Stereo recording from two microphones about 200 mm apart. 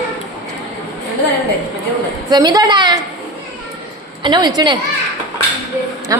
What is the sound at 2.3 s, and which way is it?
Speech, 20° right (ahead or behind).